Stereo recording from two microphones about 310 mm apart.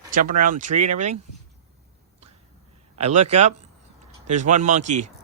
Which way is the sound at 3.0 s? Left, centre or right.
Right.